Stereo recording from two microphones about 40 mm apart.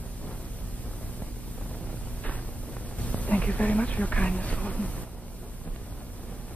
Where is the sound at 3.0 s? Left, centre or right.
Left.